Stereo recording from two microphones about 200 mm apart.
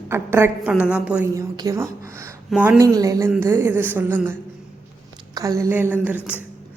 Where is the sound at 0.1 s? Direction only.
10° right (ahead or behind).